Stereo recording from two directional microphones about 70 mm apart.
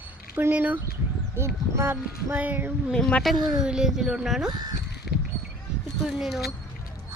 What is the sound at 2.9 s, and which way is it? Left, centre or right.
Speech, centre.